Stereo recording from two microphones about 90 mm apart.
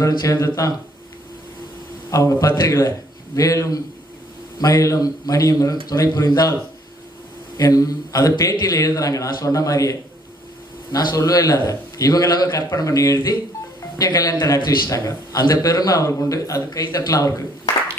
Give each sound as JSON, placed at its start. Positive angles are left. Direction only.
{"t": 0.0, "sound": "a man's voice", "side_deg": 40}
{"t": 2.0, "sound": "a man's voice", "side_deg": 40}
{"t": 7.5, "sound": "a man's voice", "side_deg": 40}